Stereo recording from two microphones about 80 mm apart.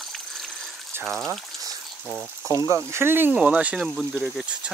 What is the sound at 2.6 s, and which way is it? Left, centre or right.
Speech, right.